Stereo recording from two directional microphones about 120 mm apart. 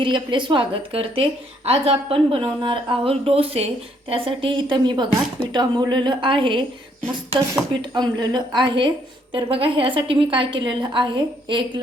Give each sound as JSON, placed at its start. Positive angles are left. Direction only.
{"t": 0.0, "sound": "speech", "side_deg": -40}
{"t": 2.4, "sound": "speech", "side_deg": -40}
{"t": 7.7, "sound": "speech", "side_deg": -40}